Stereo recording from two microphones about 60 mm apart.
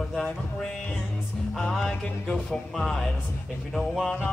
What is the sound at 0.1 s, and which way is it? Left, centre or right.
Music, centre.